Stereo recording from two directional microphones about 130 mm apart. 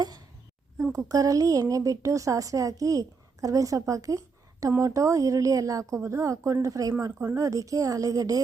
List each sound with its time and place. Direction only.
0.9 s a woman's voice: 25° right (ahead or behind)